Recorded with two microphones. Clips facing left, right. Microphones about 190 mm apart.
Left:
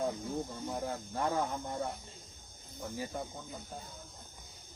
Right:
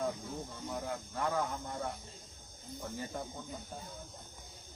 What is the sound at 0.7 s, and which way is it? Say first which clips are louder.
Speech: left 2 dB; 30° left (ahead or behind).